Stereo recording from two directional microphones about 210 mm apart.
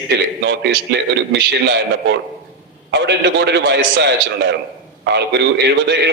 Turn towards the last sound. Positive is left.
turn(degrees=-55)  # may be behind; listen again after turning